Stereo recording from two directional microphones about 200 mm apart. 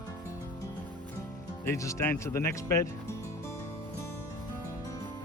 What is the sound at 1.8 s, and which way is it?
Speech, 15° left (ahead or behind).